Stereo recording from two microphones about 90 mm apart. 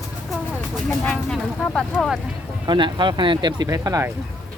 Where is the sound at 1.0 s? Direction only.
10° left (ahead or behind).